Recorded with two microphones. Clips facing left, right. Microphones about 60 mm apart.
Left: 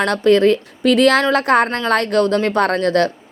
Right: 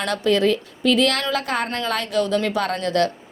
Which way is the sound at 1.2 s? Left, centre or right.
Left.